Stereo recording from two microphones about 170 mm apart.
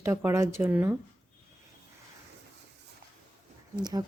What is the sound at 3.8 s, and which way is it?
Speech, 25° right (ahead or behind).